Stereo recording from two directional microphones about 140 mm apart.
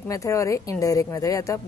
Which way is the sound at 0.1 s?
25° left (ahead or behind).